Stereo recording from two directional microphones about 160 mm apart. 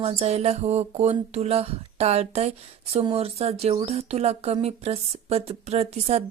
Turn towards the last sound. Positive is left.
turn(degrees=-40)  # may be behind; listen again after turning